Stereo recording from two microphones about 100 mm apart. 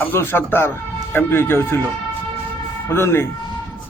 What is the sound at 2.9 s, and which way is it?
Speech, 25° left (ahead or behind).